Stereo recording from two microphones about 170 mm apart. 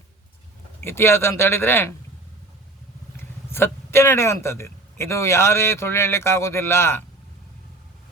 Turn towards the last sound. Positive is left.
turn(degrees=15)  # may be behind; listen again after turning